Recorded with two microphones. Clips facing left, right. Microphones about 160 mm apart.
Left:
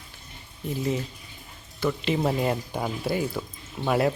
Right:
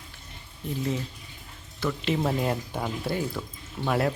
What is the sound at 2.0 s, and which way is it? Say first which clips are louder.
Speech: left 1 dB; 5° left (ahead or behind).